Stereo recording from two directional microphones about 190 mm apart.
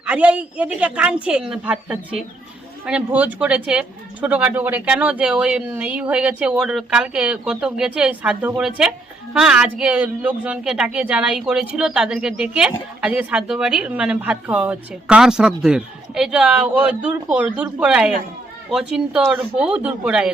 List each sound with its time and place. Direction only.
0.0 s a woman's voice: 5° right (ahead or behind)